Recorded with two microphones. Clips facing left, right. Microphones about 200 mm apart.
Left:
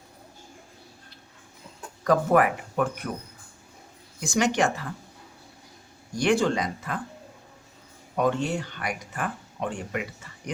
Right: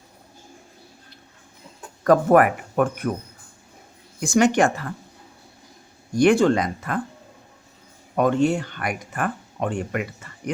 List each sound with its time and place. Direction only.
2.0 s speech: 55° right (ahead or behind)
4.2 s speech: 50° right (ahead or behind)
6.1 s speech: 55° right (ahead or behind)
8.1 s speech: 55° right (ahead or behind)